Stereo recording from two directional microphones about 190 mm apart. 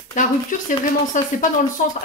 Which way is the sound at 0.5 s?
45° left (ahead or behind).